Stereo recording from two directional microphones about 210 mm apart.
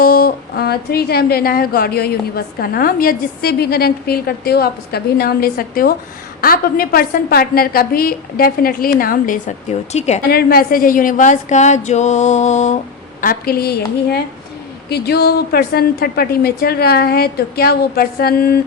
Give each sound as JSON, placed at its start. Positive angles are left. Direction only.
{"t": 0.0, "sound": "a woman's voice", "side_deg": 45}
{"t": 10.2, "sound": "speech", "side_deg": 45}
{"t": 13.2, "sound": "a woman's voice", "side_deg": 45}